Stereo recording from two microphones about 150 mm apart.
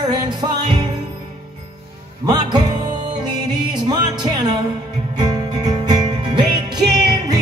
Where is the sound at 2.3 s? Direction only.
30° right (ahead or behind).